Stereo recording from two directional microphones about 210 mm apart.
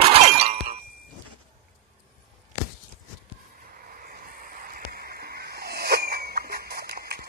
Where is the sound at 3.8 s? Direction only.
40° right (ahead or behind).